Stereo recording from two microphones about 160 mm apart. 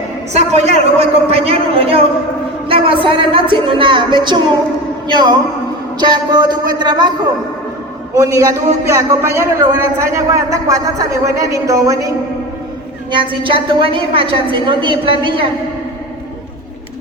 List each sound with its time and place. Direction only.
0.3 s a woman's voice: 45° right (ahead or behind); by 7.1 s 25° right (ahead or behind)
8.1 s a man's voice: 20° right (ahead or behind)
13.1 s a woman's voice: 30° right (ahead or behind)